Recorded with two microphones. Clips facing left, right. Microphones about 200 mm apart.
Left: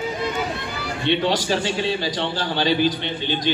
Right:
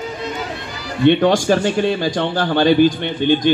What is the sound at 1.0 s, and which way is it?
A man's voice, 50° right (ahead or behind).